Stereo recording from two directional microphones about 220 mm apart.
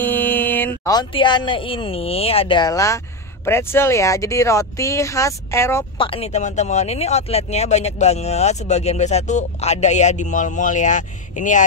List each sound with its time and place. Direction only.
0.0 s speech: 10° left (ahead or behind)
5.9 s speech: 25° left (ahead or behind)